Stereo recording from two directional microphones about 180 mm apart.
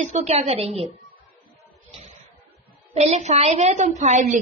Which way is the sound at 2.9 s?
40° right (ahead or behind).